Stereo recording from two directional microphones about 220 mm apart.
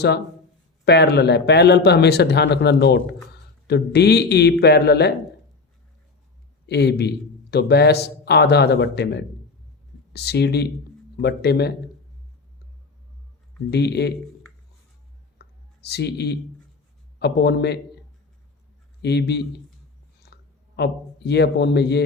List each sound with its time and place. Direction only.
0.9 s speech: 50° left (ahead or behind)
6.7 s speech: 50° left (ahead or behind)
13.7 s speech: 50° left (ahead or behind)
15.4 s clicking: 45° left (ahead or behind)
17.2 s speech: 50° left (ahead or behind)
19.0 s speech: 50° left (ahead or behind)